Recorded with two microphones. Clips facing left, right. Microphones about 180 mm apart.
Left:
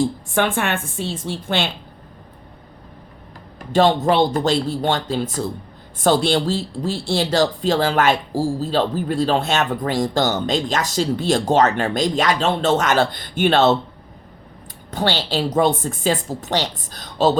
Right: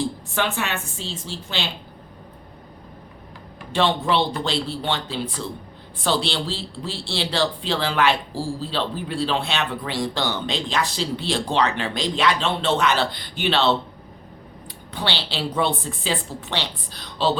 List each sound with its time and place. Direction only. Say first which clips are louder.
0.0 s speech: left 5 dB; 50° left (ahead or behind)
3.7 s speech: left 5 dB; 45° left (ahead or behind)
14.8 s speech: left 6 dB; 45° left (ahead or behind)